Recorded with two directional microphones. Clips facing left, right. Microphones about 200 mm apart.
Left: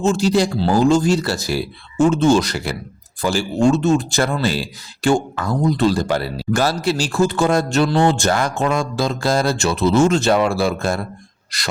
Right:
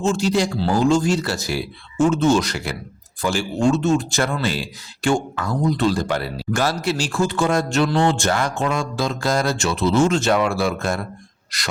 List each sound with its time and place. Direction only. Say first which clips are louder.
0.0 s speech: left 3 dB; 40° left (ahead or behind)